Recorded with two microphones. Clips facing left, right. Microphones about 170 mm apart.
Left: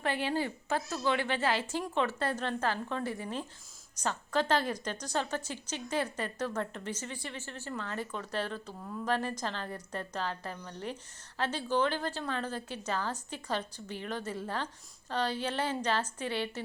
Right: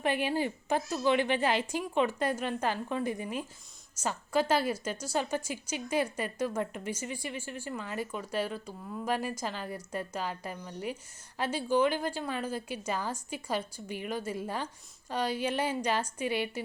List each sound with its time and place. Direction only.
0.0 s a woman's voice: 15° right (ahead or behind)